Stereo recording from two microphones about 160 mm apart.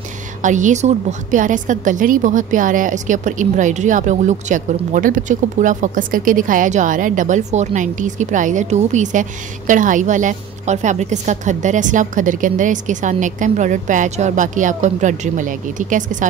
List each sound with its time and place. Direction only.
0.4 s a woman's voice: 50° right (ahead or behind)